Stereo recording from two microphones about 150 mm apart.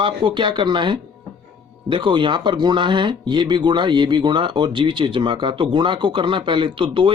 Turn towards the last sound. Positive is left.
turn(degrees=-35)  # may be behind; listen again after turning